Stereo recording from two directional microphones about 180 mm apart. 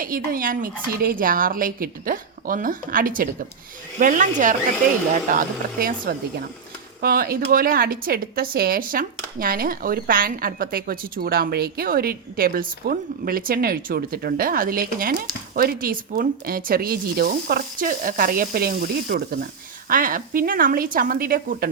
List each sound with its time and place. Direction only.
0.0 s a woman's voice: 50° right (ahead or behind)